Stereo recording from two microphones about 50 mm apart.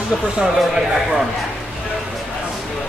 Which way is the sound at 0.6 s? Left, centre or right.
Centre.